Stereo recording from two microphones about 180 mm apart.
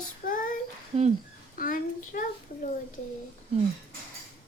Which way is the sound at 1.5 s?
50° left (ahead or behind).